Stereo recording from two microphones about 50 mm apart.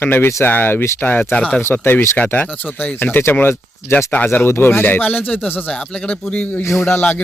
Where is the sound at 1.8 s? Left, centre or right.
Left.